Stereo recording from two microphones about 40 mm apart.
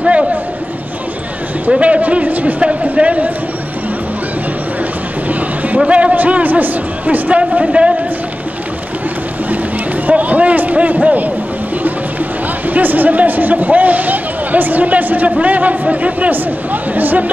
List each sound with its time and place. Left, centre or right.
1.8 s a man's voice: right
2.6 s speech: right
5.9 s a man's voice: right
6.1 s speech: right
7.6 s a man's voice: right
10.0 s a man's voice: right
12.6 s a man's voice: right